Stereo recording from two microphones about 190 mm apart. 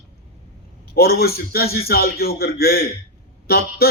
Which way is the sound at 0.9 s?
55° left (ahead or behind).